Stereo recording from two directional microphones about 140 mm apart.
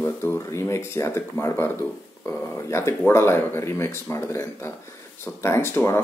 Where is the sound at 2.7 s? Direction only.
20° left (ahead or behind).